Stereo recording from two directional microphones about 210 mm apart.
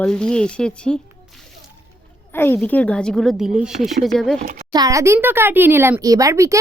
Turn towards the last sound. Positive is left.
turn(degrees=-15)  # may be behind; listen again after turning